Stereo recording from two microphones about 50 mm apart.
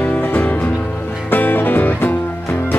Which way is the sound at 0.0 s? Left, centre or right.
Left.